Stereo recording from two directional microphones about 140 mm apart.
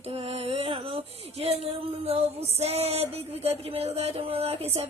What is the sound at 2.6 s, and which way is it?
Music, 50° right (ahead or behind).